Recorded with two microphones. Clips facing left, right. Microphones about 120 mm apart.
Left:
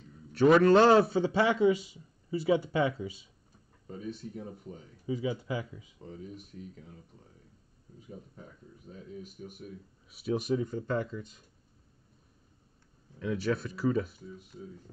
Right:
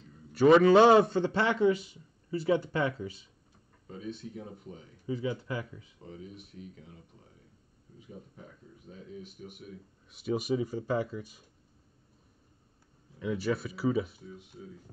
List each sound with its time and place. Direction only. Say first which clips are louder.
0.3 s a man's voice: right 1 dB; centre (ahead or behind)
4.1 s speech: right 2 dB; 40° left (ahead or behind)
5.0 s speech: left 1 dB; 15° left (ahead or behind)
6.0 s speech: left 2 dB; 40° left (ahead or behind)
9.4 s speech: left 1 dB; 40° left (ahead or behind)
10.0 s speech: even; centre (ahead or behind)
13.2 s a man's voice: even; 5° right (ahead or behind)